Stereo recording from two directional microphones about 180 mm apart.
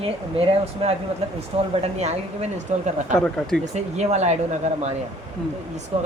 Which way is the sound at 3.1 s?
5° left (ahead or behind).